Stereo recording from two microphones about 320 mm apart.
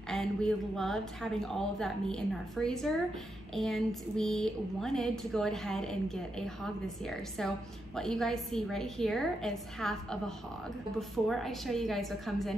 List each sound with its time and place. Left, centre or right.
0.1 s speech: centre